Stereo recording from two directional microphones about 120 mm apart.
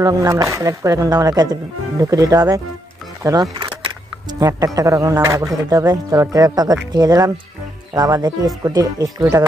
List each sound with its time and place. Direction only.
0.0 s speech: 30° right (ahead or behind)
3.3 s camera: 35° right (ahead or behind)
4.7 s speech: 25° right (ahead or behind)